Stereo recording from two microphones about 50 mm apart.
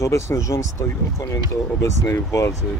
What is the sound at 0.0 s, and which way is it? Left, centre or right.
Speech, left.